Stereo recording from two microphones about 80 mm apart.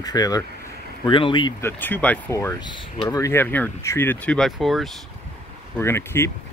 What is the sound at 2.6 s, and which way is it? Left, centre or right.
Speech, left.